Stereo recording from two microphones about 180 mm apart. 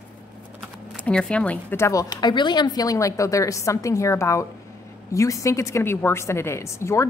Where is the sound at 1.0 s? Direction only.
5° left (ahead or behind).